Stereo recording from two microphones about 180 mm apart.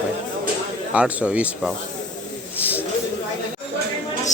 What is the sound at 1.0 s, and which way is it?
Speech, 10° right (ahead or behind).